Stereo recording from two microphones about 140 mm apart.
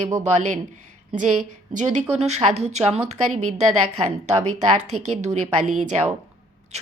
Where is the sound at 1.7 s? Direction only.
60° right (ahead or behind).